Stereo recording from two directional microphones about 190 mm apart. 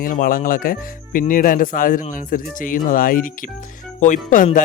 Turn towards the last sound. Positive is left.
turn(degrees=45)  # may be behind; listen again after turning